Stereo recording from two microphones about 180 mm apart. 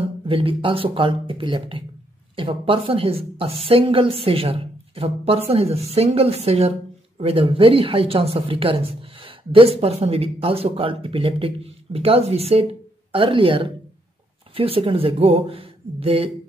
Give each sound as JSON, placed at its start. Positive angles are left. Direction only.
{"t": 0.2, "sound": "speech", "side_deg": -30}